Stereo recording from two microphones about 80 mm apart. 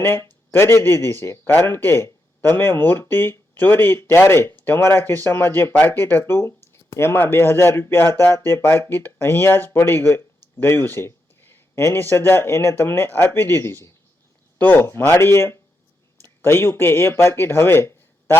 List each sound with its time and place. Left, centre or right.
0.0 s a man's voice: left